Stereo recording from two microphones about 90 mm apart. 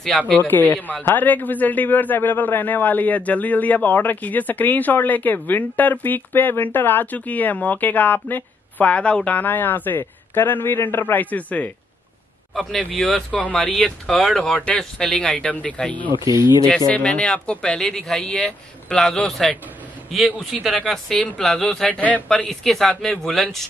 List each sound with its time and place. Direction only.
0.1 s speech: centre (ahead or behind)
0.5 s a man's voice: 20° left (ahead or behind)
12.8 s speech: 15° left (ahead or behind)
16.3 s speech: 35° right (ahead or behind)
16.9 s speech: 10° left (ahead or behind)
22.5 s speech: 5° left (ahead or behind)